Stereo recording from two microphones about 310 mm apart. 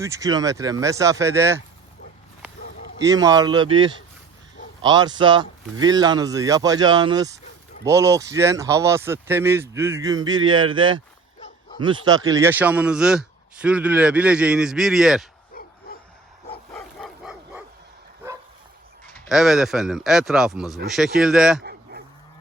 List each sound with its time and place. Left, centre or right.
0.0 s speech: centre
2.6 s a sound: left
3.0 s a man's voice: centre
15.6 s a sound: left
16.7 s dog: centre
19.0 s a man's voice: centre
21.6 s dog: right